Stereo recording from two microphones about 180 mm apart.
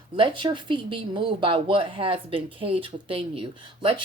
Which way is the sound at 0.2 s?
25° right (ahead or behind).